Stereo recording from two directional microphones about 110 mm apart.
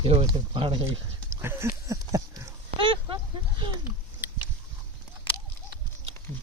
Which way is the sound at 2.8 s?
50° right (ahead or behind).